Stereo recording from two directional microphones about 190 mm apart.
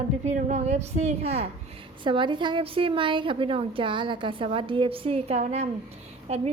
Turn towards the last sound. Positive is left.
turn(degrees=-35)  # may be behind; listen again after turning